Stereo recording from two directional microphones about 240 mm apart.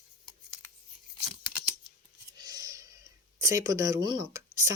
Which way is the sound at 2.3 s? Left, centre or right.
Centre.